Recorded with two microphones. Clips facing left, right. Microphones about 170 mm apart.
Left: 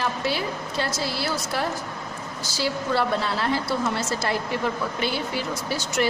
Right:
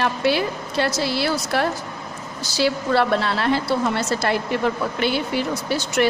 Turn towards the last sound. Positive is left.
turn(degrees=-65)  # may be behind; listen again after turning